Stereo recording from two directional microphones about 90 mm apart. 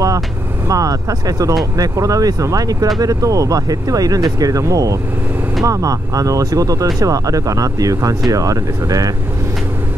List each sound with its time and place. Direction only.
0.7 s speech: 40° right (ahead or behind)